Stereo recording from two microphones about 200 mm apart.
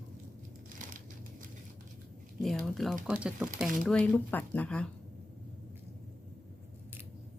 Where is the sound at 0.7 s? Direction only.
40° right (ahead or behind).